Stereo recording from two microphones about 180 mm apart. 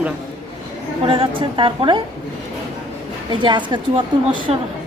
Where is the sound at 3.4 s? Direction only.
25° right (ahead or behind).